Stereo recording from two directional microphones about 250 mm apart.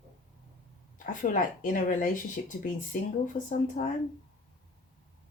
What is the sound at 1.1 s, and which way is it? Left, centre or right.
Speech, left.